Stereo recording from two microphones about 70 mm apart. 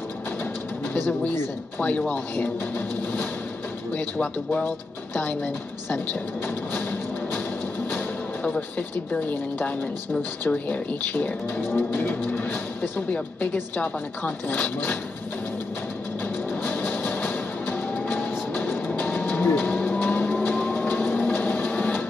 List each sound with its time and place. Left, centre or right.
1.8 s speech: centre
3.9 s speech: left
6.4 s a sound: left
8.5 s speech: left
13.1 s speech: centre
16.6 s music: left
18.9 s a sound: left
19.6 s music: left
20.6 s printer: left